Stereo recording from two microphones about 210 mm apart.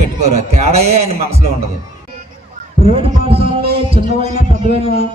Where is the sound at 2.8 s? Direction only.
30° right (ahead or behind).